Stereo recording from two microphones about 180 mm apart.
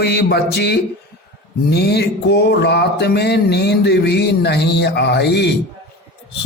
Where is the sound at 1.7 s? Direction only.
65° left (ahead or behind).